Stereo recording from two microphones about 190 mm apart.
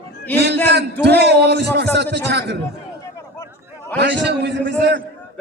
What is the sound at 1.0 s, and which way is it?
A man's voice, 60° right (ahead or behind).